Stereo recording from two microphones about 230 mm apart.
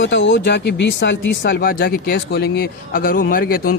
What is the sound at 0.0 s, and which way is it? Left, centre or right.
Speech, left.